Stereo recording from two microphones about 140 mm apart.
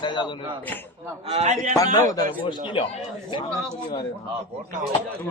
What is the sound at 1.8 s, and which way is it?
Speech, 25° left (ahead or behind).